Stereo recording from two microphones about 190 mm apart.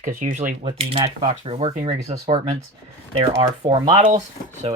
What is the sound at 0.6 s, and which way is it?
Speech, 25° right (ahead or behind).